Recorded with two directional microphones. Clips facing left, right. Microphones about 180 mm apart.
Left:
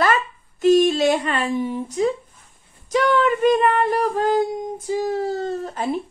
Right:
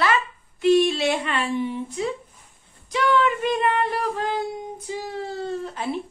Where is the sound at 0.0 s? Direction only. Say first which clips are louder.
Left 3 dB; 45° left (ahead or behind).